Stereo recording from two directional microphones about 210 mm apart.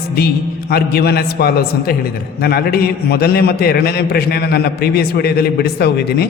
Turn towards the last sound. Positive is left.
turn(degrees=50)  # may be behind; listen again after turning